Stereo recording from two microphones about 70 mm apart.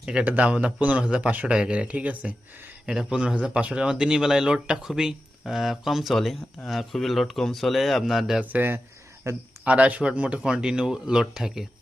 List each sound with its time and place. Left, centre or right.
0.0 s speech: centre
8.4 s speech: right
9.2 s speech: right
9.6 s speech: centre